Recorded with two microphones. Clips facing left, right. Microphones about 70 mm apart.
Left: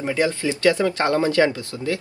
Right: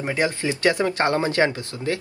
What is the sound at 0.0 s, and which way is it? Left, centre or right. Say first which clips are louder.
Speech: left 2 dB; right.